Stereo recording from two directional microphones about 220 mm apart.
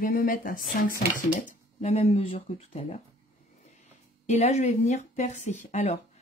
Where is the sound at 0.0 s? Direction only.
40° left (ahead or behind).